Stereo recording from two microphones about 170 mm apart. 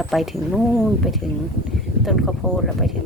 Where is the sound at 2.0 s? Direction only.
Centre (ahead or behind).